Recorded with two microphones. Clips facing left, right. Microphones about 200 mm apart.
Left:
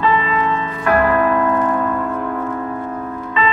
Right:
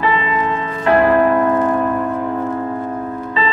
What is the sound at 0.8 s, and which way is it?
Music, 25° right (ahead or behind).